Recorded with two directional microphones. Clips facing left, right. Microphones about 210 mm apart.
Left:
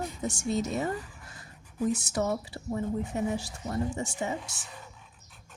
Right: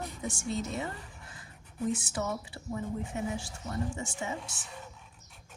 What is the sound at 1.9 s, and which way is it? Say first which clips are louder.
A woman's voice: left 5 dB; 40° left (ahead or behind).